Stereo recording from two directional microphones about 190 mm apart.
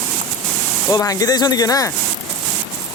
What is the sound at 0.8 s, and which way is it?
Speech, 20° left (ahead or behind).